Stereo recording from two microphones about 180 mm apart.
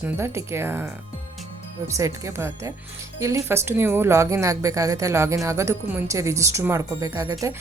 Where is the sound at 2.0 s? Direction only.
15° right (ahead or behind).